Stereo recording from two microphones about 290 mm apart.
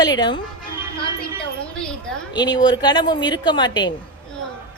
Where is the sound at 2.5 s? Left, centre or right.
Centre.